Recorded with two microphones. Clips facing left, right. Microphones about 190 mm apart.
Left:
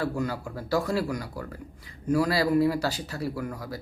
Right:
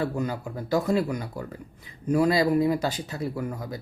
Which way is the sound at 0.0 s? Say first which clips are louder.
Right 1 dB; 20° right (ahead or behind).